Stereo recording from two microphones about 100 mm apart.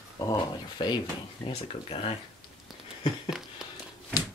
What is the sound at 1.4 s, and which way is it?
Speech, 70° left (ahead or behind).